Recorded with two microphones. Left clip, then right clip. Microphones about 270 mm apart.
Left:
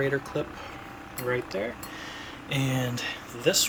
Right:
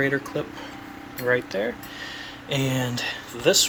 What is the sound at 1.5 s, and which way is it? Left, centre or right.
Speech, centre.